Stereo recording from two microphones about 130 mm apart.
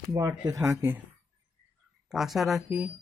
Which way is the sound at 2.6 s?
10° right (ahead or behind).